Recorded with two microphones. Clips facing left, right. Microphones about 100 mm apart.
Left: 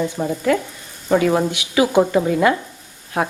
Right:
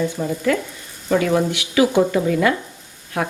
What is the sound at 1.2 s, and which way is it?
Speech, 25° left (ahead or behind).